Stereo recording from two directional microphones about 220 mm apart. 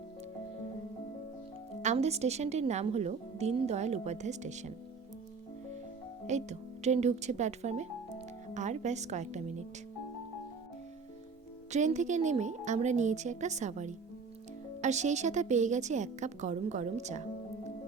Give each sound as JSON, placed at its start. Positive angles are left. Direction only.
{"t": 1.8, "sound": "a woman's voice", "side_deg": -30}
{"t": 6.2, "sound": "a woman's voice", "side_deg": -30}
{"t": 11.7, "sound": "a woman's voice", "side_deg": -30}